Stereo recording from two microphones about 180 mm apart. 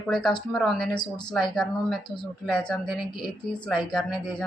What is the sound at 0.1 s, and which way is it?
Speech, centre (ahead or behind).